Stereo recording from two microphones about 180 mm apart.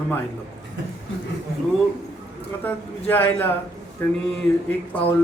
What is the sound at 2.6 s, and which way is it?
Speech, 10° left (ahead or behind).